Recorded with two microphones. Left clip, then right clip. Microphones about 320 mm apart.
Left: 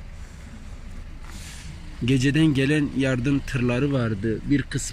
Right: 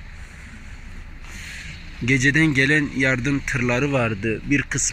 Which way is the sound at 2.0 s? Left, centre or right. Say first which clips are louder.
Right 4 dB; centre.